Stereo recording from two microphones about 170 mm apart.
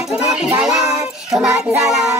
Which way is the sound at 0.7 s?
20° right (ahead or behind).